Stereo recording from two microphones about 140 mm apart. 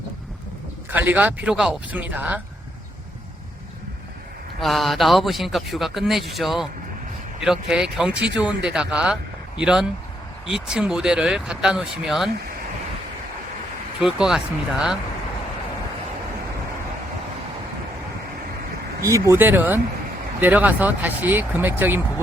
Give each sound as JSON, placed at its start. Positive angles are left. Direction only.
{"t": 0.9, "sound": "speech", "side_deg": -15}
{"t": 4.6, "sound": "speech", "side_deg": 0}
{"t": 14.0, "sound": "speech", "side_deg": -5}
{"t": 19.0, "sound": "speech", "side_deg": -25}